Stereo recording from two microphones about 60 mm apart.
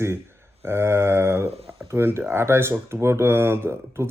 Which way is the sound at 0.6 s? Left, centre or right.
Right.